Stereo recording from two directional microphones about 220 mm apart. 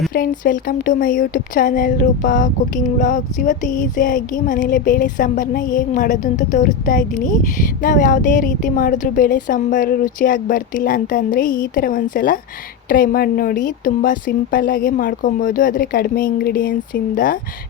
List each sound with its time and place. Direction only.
0.1 s speech: 40° left (ahead or behind)